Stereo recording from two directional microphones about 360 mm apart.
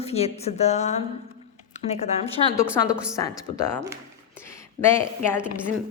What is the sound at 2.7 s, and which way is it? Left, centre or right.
A woman's voice, centre.